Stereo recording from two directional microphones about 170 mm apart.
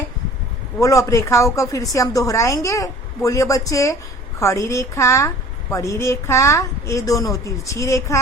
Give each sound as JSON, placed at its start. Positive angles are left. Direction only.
{"t": 0.8, "sound": "a woman's voice", "side_deg": 20}